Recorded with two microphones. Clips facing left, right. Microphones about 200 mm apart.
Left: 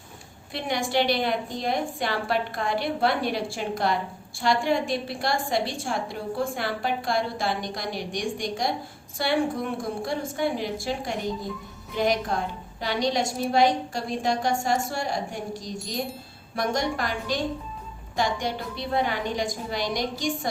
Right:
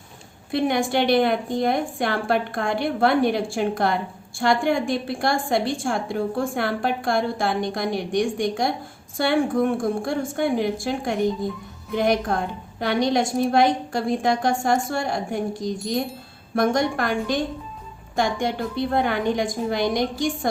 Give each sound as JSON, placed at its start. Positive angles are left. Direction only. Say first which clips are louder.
{"t": 0.5, "sound": "a woman's voice", "louder": "right 5 dB", "side_deg": -55}